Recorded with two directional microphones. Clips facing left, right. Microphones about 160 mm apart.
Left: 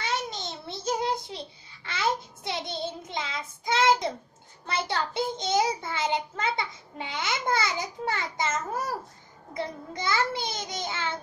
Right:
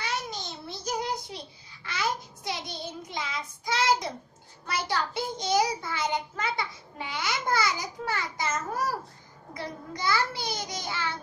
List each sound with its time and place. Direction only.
0.0 s child singing: 25° left (ahead or behind)
4.6 s a child's voice: 25° left (ahead or behind)